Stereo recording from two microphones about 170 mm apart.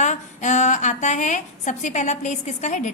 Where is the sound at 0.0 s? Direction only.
45° left (ahead or behind).